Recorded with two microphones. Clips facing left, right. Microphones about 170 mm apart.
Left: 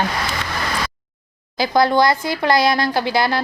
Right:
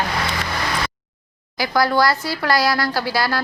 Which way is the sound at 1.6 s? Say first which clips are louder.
Left 3 dB; 20° left (ahead or behind).